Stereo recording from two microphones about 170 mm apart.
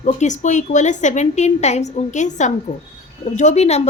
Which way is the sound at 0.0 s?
45° left (ahead or behind).